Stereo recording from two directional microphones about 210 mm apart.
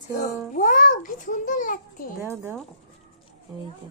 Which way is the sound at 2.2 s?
10° right (ahead or behind).